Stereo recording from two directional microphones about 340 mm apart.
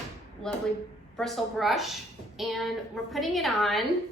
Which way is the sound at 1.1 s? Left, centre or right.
Centre.